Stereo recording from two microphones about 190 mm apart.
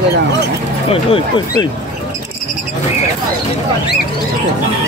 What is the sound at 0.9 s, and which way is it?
Speech, 30° left (ahead or behind).